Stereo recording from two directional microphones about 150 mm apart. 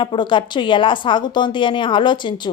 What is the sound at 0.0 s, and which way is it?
A woman's voice, 30° left (ahead or behind).